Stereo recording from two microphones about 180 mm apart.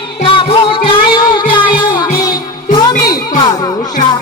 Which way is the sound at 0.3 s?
30° left (ahead or behind).